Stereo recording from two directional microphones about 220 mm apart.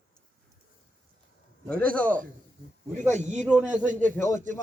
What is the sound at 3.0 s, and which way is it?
Speech, 35° right (ahead or behind).